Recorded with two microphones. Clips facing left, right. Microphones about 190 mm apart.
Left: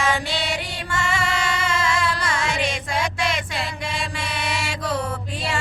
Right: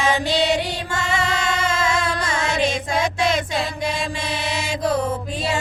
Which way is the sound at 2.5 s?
40° right (ahead or behind).